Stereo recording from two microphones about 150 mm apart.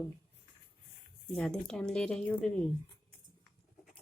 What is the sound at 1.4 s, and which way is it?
Speech, 5° left (ahead or behind).